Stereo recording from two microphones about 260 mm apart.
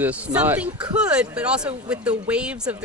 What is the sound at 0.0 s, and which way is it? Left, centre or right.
Speech, centre.